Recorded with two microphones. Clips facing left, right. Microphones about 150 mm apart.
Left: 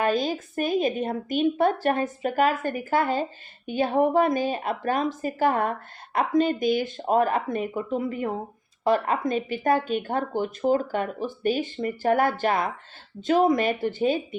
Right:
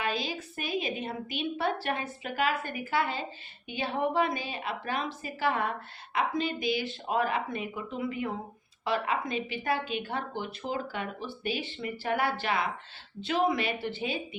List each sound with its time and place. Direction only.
0.0 s speech: 45° left (ahead or behind)